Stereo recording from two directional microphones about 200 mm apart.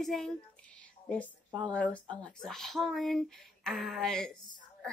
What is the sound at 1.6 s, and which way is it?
A woman's voice, 5° left (ahead or behind).